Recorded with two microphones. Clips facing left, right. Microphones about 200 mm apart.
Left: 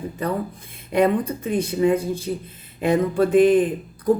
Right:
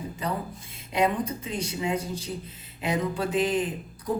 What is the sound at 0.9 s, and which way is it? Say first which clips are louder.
A woman's voice: left 6 dB; 55° left (ahead or behind).